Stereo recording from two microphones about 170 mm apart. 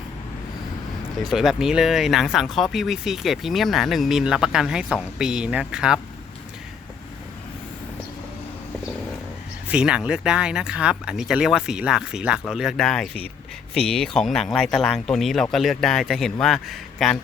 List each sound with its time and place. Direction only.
1.3 s speech: centre (ahead or behind)
9.6 s speech: 5° right (ahead or behind)